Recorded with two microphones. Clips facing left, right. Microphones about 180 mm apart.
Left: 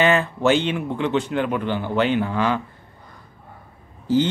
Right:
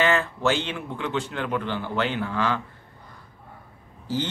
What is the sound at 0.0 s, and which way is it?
A man's voice, 20° left (ahead or behind).